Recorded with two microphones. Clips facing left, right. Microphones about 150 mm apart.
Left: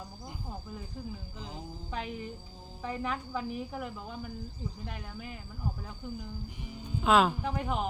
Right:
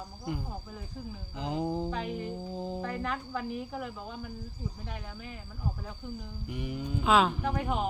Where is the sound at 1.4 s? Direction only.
70° right (ahead or behind).